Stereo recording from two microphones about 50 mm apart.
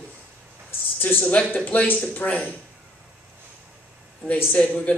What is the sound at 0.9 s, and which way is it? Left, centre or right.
A woman's voice, left.